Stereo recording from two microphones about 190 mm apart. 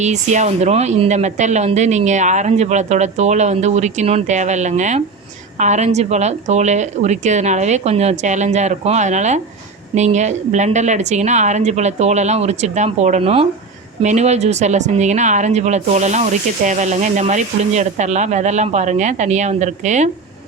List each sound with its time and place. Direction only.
0.0 s speech: 40° right (ahead or behind)